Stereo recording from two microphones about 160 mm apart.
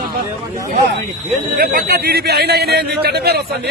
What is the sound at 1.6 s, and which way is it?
A man's voice, 65° right (ahead or behind).